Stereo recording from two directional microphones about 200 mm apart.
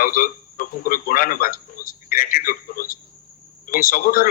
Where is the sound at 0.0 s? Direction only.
45° left (ahead or behind).